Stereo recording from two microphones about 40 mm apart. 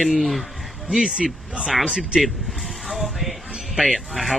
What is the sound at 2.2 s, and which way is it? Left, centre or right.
Vehicle, centre.